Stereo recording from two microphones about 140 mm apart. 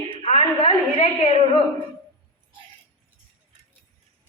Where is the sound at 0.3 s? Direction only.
45° left (ahead or behind).